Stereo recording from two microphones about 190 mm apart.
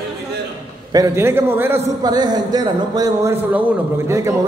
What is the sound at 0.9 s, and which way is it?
A man's voice, 15° right (ahead or behind).